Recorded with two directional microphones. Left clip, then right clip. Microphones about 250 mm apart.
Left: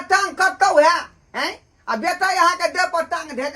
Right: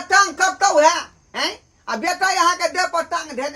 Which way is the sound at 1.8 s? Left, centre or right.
Centre.